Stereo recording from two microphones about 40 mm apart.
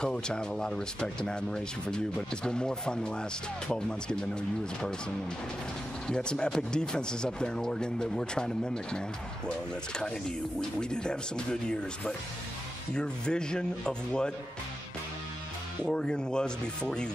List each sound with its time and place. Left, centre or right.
0.0 s speech: centre
6.0 s speech: centre
10.8 s speech: left
12.9 s speech: left
15.8 s speech: centre